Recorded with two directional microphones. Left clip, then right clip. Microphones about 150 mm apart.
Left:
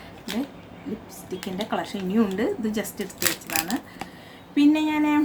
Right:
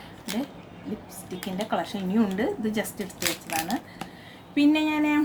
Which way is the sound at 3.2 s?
20° left (ahead or behind).